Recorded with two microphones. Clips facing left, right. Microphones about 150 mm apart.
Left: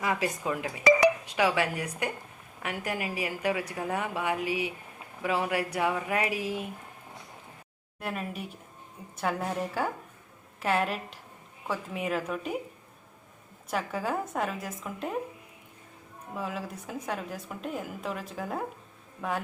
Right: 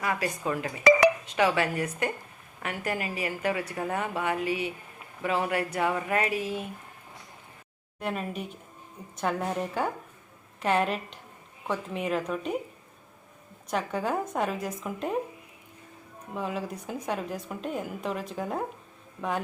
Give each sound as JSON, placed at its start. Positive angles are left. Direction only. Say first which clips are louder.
{"t": 0.0, "sound": "a woman's voice", "louder": "even", "side_deg": 15}
{"t": 0.9, "sound": "dishes", "louder": "right 2 dB", "side_deg": -65}
{"t": 1.2, "sound": "a woman's voice", "louder": "right 1 dB", "side_deg": 10}
{"t": 7.9, "sound": "a woman's voice", "louder": "right 3 dB", "side_deg": 5}
{"t": 13.7, "sound": "a woman's voice", "louder": "right 2 dB", "side_deg": 5}
{"t": 16.3, "sound": "a woman's voice", "louder": "right 3 dB", "side_deg": 0}